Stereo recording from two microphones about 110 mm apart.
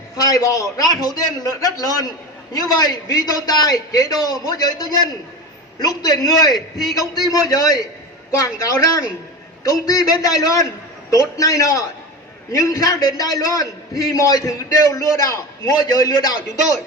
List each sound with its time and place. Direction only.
0.2 s a man's voice: 35° left (ahead or behind)